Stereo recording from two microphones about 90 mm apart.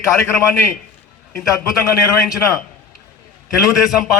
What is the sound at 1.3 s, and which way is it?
Speech, centre (ahead or behind).